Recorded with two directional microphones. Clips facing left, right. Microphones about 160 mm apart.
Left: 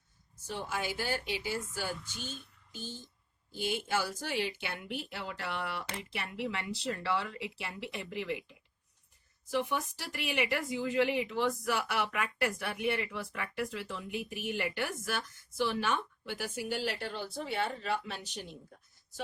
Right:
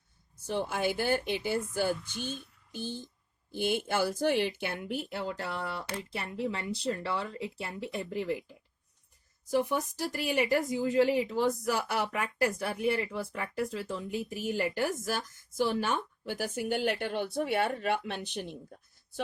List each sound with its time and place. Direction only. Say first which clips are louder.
0.4 s a woman's voice: right 6 dB; 55° right (ahead or behind)
3.5 s a woman's voice: right 3 dB; 55° right (ahead or behind)